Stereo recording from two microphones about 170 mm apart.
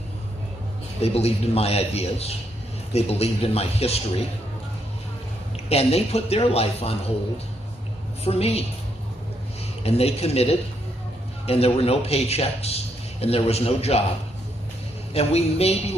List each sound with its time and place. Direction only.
1.0 s a man's voice: 35° left (ahead or behind)
5.6 s a man's voice: 35° left (ahead or behind)
8.2 s a man's voice: 35° left (ahead or behind)
9.8 s a man's voice: 35° left (ahead or behind)
15.1 s a man's voice: 40° left (ahead or behind)